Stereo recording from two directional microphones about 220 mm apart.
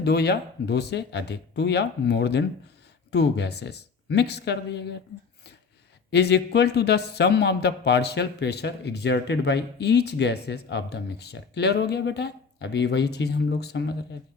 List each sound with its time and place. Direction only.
0.0 s speech: 50° left (ahead or behind)
6.1 s speech: 50° left (ahead or behind)